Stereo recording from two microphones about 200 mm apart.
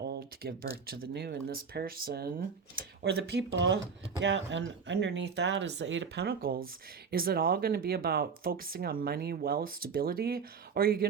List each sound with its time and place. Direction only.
0.0 s speech: 50° right (ahead or behind)